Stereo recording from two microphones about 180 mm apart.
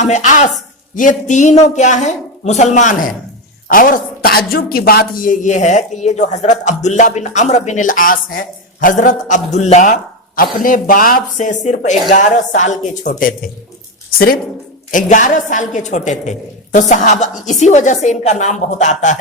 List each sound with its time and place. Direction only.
0.0 s a woman's voice: 40° left (ahead or behind)
14.8 s a woman's voice: 45° left (ahead or behind)